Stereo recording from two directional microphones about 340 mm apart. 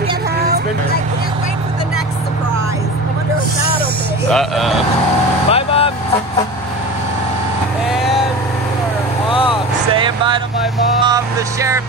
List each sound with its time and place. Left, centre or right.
4.3 s speech: centre
5.5 s vehicle: centre
7.9 s vehicle: centre
9.3 s vehicle: centre
9.9 s vehicle: centre
11.1 s music: centre